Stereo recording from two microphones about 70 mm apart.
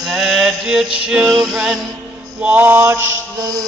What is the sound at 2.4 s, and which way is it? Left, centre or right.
Mantra, right.